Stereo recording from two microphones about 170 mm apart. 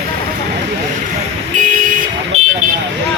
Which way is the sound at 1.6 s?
50° right (ahead or behind).